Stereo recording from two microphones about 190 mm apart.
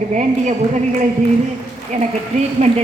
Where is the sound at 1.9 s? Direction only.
40° right (ahead or behind).